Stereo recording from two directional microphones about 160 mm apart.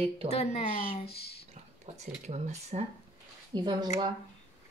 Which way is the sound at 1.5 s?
45° right (ahead or behind).